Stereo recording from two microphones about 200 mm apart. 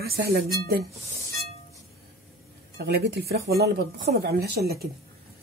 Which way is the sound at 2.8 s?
55° right (ahead or behind).